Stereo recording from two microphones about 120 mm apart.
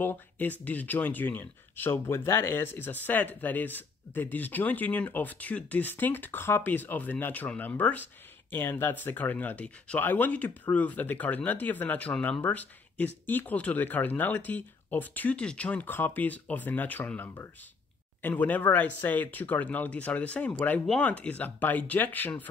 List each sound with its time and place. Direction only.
0.0 s speech: 15° left (ahead or behind)